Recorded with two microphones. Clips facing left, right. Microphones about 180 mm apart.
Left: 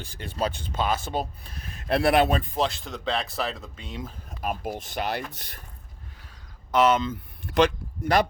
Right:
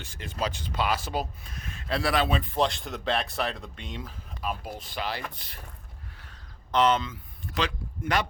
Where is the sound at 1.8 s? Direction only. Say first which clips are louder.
Left 6 dB; 55° left (ahead or behind).